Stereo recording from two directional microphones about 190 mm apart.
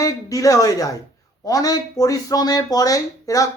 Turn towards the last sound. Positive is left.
turn(degrees=15)  # may be behind; listen again after turning